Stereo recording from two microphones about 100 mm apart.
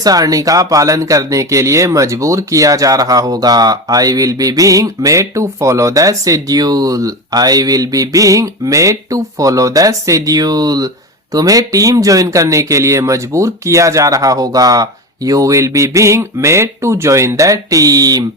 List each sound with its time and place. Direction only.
0.0 s speech: 40° right (ahead or behind)